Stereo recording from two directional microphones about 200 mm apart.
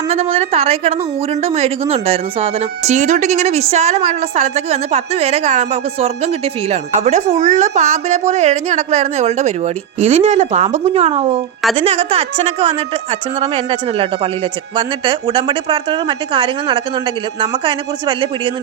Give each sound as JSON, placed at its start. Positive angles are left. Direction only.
{"t": 0.1, "sound": "a woman's voice", "side_deg": -30}